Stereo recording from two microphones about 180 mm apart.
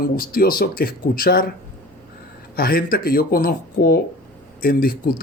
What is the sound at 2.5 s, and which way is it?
Speech, 55° left (ahead or behind).